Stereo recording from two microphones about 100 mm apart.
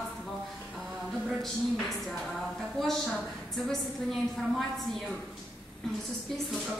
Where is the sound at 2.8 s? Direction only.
Centre (ahead or behind).